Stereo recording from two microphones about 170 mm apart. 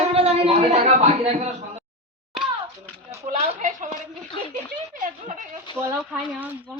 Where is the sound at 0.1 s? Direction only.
35° right (ahead or behind).